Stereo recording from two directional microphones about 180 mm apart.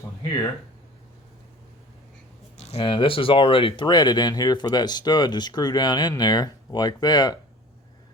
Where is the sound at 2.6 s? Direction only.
35° left (ahead or behind).